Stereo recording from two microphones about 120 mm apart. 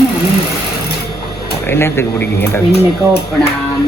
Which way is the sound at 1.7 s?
20° left (ahead or behind).